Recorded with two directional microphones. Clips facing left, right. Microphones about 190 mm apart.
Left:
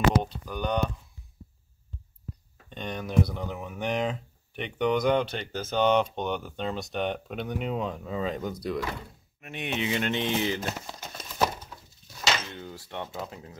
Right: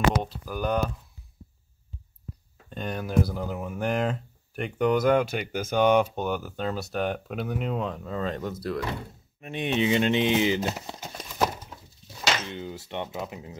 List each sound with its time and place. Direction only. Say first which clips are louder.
0.2 s speech: right 2 dB; 5° right (ahead or behind)
2.7 s speech: right 1 dB; 5° right (ahead or behind)
9.4 s speech: right 6 dB; 25° right (ahead or behind)